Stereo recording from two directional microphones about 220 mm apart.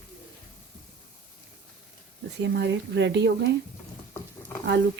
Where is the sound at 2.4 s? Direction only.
55° right (ahead or behind).